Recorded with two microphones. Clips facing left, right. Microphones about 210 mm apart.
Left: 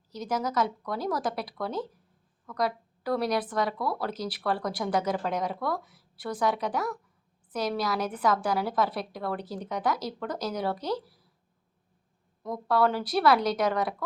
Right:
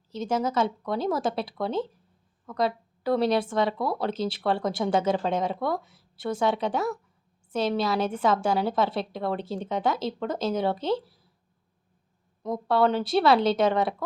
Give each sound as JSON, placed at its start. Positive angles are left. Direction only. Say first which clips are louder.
{"t": 0.1, "sound": "speech", "louder": "right 4 dB", "side_deg": -25}
{"t": 12.4, "sound": "speech", "louder": "right 2 dB", "side_deg": -25}